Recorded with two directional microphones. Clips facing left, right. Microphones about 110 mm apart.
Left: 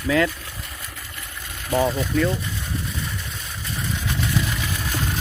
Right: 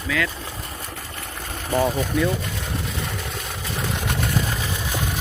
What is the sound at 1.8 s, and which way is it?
Speech, 5° right (ahead or behind).